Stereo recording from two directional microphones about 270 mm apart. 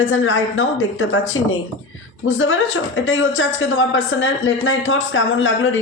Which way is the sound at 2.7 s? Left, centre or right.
Left.